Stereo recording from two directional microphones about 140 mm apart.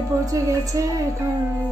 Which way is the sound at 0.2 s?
25° right (ahead or behind).